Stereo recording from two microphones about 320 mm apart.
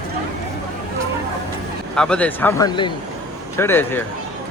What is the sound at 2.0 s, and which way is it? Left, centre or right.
Speech, centre.